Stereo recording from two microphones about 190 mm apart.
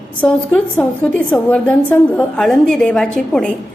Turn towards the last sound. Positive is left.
turn(degrees=5)  # may be behind; listen again after turning